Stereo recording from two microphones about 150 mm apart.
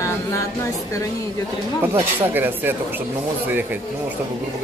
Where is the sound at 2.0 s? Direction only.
15° right (ahead or behind).